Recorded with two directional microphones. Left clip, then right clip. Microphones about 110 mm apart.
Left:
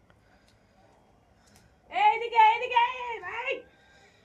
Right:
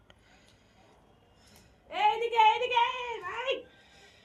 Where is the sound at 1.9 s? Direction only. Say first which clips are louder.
Left 3 dB; 30° right (ahead or behind).